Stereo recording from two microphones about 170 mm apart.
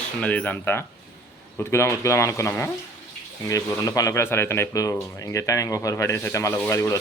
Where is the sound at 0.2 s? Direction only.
10° left (ahead or behind).